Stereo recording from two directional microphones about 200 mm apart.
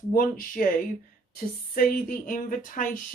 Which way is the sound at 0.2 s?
45° left (ahead or behind).